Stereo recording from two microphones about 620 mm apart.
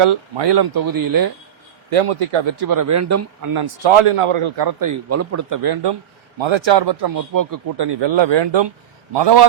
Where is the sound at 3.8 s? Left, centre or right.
Right.